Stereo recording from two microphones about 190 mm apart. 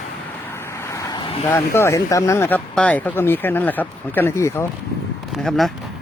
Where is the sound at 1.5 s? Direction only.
15° left (ahead or behind).